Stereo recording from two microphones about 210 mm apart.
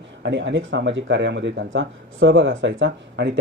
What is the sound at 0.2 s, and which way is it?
Speech, 60° right (ahead or behind).